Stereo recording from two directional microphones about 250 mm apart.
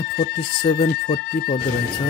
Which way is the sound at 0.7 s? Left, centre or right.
Left.